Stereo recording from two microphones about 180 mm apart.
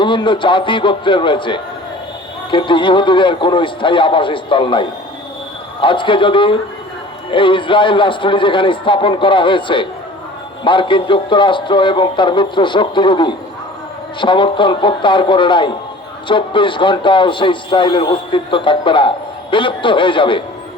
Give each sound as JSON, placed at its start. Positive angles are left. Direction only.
{"t": 0.0, "sound": "speech", "side_deg": 25}